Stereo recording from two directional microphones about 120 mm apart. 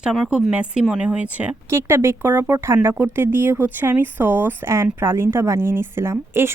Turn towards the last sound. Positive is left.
turn(degrees=-20)  # may be behind; listen again after turning